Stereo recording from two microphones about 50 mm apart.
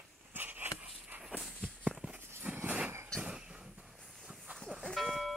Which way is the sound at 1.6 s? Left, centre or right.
Centre.